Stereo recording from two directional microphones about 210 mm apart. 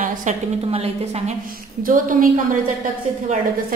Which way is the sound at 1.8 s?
40° right (ahead or behind).